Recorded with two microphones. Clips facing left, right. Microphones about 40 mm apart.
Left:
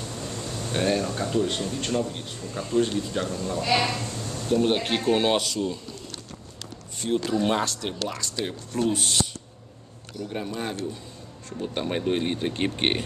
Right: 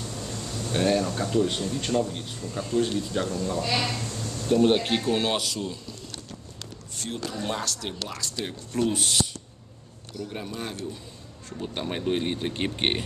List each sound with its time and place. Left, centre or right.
0.0 s speech: centre
3.6 s speech: centre
4.5 s speech: centre
7.0 s speech: centre
10.2 s speech: centre